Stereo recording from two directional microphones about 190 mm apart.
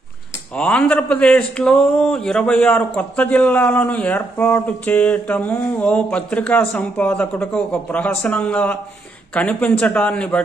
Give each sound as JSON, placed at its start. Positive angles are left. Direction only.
{"t": 0.6, "sound": "a man's voice", "side_deg": 5}